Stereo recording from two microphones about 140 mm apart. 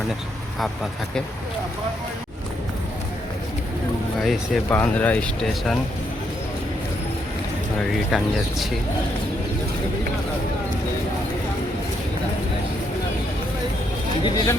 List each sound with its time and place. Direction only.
4.2 s speech: centre (ahead or behind)
4.8 s speech: 10° left (ahead or behind)
8.1 s speech: centre (ahead or behind)
14.3 s speech: 30° left (ahead or behind)